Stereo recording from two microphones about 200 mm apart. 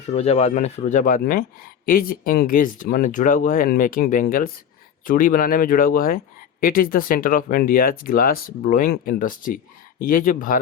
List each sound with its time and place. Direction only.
0.1 s speech: 35° left (ahead or behind)